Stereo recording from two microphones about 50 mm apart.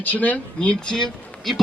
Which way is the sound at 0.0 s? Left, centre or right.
Left.